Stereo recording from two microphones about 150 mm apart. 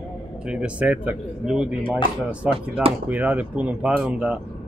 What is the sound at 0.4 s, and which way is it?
Speech, 5° right (ahead or behind).